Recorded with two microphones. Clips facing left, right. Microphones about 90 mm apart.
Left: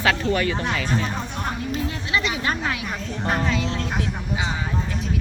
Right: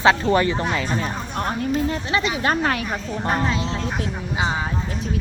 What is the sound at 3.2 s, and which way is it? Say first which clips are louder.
Speech: right 1 dB; centre (ahead or behind).